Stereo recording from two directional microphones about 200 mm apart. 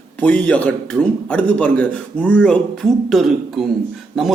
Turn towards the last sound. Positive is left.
turn(degrees=0)  # may be behind; listen again after turning